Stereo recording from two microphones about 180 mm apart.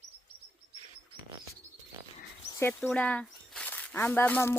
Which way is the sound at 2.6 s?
10° left (ahead or behind).